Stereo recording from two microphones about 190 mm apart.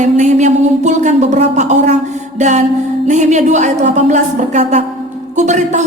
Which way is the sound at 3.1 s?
40° right (ahead or behind).